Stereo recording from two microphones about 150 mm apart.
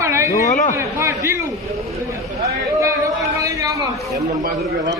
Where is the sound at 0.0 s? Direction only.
20° right (ahead or behind).